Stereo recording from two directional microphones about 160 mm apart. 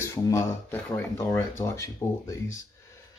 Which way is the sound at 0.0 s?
15° left (ahead or behind).